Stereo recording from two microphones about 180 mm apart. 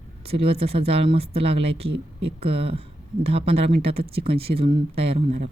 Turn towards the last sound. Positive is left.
turn(degrees=-35)  # may be behind; listen again after turning